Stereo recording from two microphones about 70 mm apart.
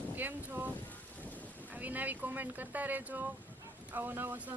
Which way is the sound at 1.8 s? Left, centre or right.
Right.